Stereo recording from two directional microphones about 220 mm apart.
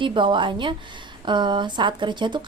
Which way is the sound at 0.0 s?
20° right (ahead or behind).